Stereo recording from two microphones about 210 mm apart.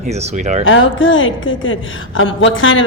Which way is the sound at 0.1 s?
35° right (ahead or behind).